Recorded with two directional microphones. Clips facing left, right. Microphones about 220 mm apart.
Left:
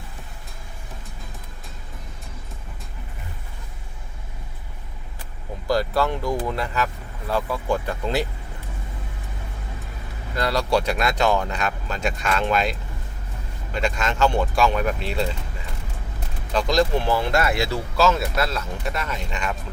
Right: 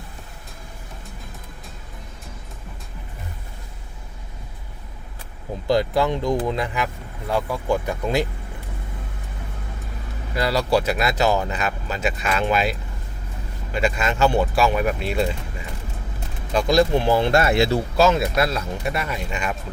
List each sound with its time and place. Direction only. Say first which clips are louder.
5.6 s speech: right 2 dB; 20° right (ahead or behind)
10.3 s speech: right 2 dB; 5° right (ahead or behind)
13.7 s speech: right 2 dB; 5° right (ahead or behind)
16.5 s speech: right 3 dB; 10° right (ahead or behind)
17.2 s speech: right 4 dB; 25° right (ahead or behind); by 19.5 s 10° right (ahead or behind)